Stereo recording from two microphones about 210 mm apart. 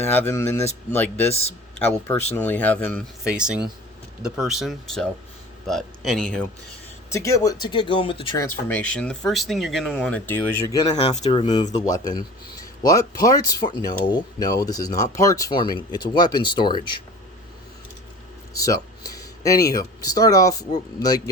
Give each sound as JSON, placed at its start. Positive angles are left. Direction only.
{"t": 0.0, "sound": "speech", "side_deg": 10}
{"t": 1.3, "sound": "speech", "side_deg": 30}
{"t": 2.3, "sound": "speech", "side_deg": 10}
{"t": 3.2, "sound": "speech", "side_deg": -5}
{"t": 7.1, "sound": "speech", "side_deg": 15}
{"t": 8.4, "sound": "speech", "side_deg": 10}
{"t": 10.9, "sound": "speech", "side_deg": 30}
{"t": 12.8, "sound": "speech", "side_deg": 15}
{"t": 18.6, "sound": "a sound", "side_deg": 15}
{"t": 19.7, "sound": "speech", "side_deg": 15}